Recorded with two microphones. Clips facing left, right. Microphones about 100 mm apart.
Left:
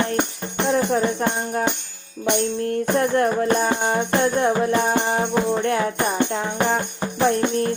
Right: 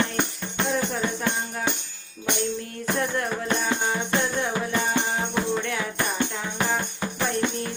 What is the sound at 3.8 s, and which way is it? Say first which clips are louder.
Music: left 6 dB; 50° left (ahead or behind).